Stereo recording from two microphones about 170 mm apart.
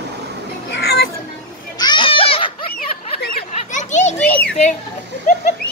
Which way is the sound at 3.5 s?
45° left (ahead or behind).